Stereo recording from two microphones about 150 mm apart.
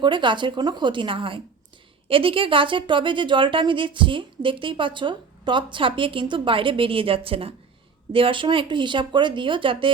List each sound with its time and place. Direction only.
0.0 s speech: 30° right (ahead or behind)